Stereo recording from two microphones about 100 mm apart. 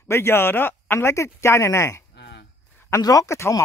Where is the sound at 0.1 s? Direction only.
25° left (ahead or behind).